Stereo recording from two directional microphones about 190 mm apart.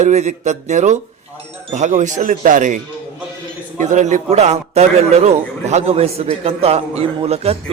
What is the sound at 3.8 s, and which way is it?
A man's voice, 40° right (ahead or behind).